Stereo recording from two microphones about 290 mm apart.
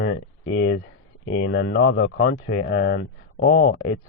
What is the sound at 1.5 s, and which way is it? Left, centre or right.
Speech, left.